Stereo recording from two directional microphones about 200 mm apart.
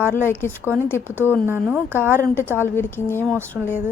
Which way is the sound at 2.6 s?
10° left (ahead or behind).